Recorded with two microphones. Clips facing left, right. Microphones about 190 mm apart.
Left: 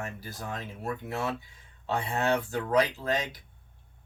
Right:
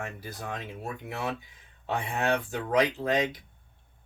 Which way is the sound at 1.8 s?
15° right (ahead or behind).